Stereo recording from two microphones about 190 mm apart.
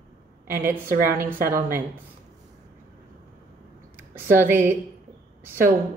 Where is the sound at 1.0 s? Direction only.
15° right (ahead or behind).